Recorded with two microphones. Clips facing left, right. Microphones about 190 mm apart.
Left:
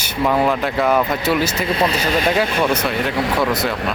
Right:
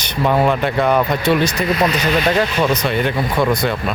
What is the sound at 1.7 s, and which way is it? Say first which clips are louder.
Speech: right 1 dB; 30° left (ahead or behind).